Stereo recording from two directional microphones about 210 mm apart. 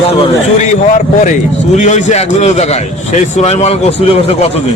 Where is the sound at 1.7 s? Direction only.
35° left (ahead or behind).